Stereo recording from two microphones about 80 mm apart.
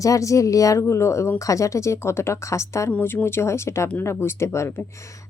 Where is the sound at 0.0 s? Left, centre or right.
Left.